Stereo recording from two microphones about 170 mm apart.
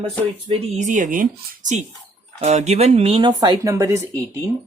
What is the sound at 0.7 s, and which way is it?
Speech, 45° right (ahead or behind).